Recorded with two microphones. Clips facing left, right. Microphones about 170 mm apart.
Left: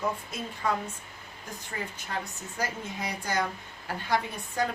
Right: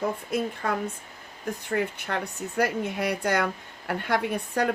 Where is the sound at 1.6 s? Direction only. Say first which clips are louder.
Right 9 dB; 65° right (ahead or behind).